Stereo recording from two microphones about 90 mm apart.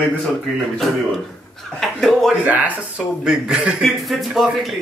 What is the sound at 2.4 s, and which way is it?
A man's voice, 15° right (ahead or behind).